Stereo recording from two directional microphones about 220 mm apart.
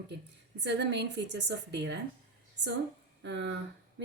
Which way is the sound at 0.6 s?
50° right (ahead or behind).